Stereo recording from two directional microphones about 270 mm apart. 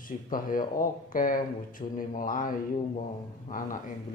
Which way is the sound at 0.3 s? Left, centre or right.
Left.